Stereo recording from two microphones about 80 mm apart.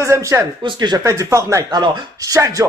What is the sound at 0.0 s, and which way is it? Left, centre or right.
Speech, right.